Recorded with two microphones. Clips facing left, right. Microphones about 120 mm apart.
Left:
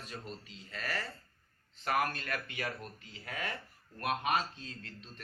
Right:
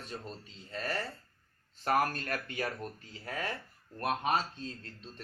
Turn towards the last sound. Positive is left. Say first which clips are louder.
# right 4 dB
turn(degrees=-35)  # may be behind; listen again after turning